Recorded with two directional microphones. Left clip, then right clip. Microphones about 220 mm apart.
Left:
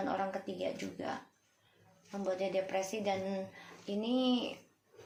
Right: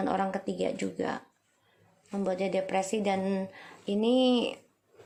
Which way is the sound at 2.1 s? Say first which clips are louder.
Right 5 dB; 40° right (ahead or behind).